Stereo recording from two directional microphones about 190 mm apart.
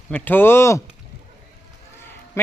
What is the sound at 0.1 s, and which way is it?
Speech, 10° left (ahead or behind).